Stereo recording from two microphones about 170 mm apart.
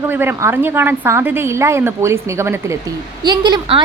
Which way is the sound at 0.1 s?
10° right (ahead or behind).